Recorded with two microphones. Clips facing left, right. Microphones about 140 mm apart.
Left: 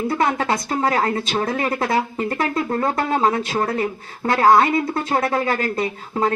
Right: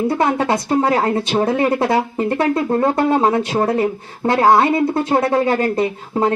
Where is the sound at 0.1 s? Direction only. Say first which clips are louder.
Right 3 dB; 15° right (ahead or behind).